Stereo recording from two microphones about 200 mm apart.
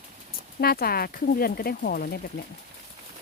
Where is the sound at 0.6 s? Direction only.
50° left (ahead or behind).